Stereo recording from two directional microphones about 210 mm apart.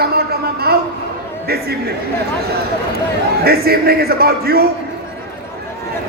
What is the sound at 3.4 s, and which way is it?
A man's voice, 45° right (ahead or behind).